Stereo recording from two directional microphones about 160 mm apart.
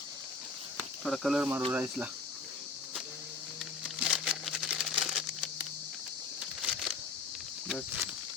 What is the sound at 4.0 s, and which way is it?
Crumpling, 5° right (ahead or behind).